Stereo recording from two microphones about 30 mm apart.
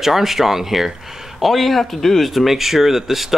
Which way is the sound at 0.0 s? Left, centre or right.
Centre.